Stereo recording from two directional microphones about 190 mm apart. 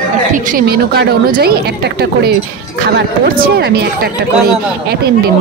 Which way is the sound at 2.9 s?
50° right (ahead or behind).